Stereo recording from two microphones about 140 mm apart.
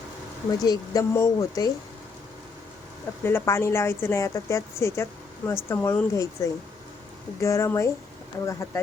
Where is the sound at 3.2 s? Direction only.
15° left (ahead or behind).